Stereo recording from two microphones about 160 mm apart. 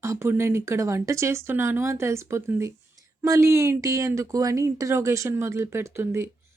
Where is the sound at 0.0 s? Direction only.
15° right (ahead or behind).